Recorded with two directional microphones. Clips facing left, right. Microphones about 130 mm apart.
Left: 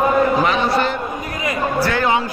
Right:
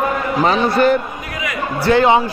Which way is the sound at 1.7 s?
25° right (ahead or behind).